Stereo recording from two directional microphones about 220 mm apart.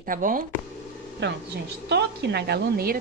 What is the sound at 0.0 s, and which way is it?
Speech, 40° right (ahead or behind).